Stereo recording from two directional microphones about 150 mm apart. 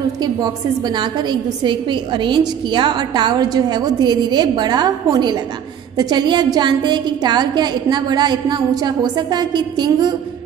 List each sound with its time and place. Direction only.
0.2 s a woman's voice: 25° right (ahead or behind)